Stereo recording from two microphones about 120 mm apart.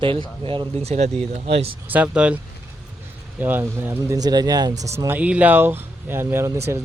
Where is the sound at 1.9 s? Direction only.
10° right (ahead or behind).